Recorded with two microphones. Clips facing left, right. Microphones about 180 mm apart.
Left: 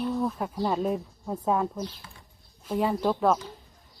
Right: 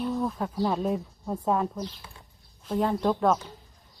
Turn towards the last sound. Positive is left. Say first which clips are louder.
# even
turn(degrees=0)  # may be behind; listen again after turning